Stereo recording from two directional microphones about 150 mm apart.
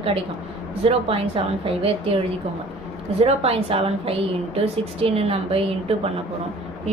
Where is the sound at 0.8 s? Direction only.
40° right (ahead or behind).